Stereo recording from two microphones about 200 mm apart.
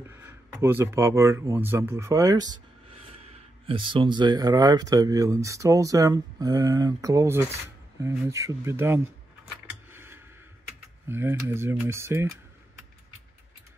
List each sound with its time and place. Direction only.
0.0 s speech: 10° right (ahead or behind)
9.7 s a sound: 10° right (ahead or behind)
11.1 s speech: 10° right (ahead or behind)